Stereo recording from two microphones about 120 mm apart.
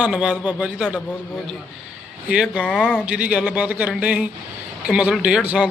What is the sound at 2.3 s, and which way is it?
Speech, 10° right (ahead or behind).